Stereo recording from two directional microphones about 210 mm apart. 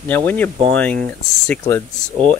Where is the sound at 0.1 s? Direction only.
10° left (ahead or behind).